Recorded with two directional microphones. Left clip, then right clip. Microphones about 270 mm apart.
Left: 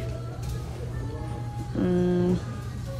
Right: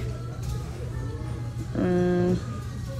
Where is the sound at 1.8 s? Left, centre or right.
Centre.